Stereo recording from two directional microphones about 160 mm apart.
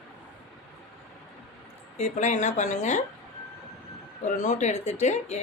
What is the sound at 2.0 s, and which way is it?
Speech, 45° left (ahead or behind).